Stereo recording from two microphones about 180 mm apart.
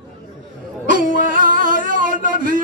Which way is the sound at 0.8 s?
45° right (ahead or behind).